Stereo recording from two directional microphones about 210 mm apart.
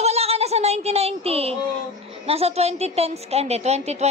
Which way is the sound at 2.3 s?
30° right (ahead or behind).